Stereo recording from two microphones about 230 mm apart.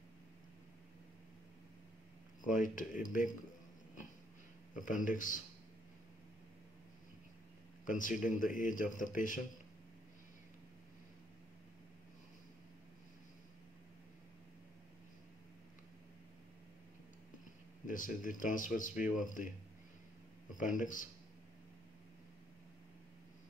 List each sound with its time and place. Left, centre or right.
2.4 s speech: left
4.7 s speech: left
7.8 s speech: left
17.8 s speech: left
20.5 s speech: left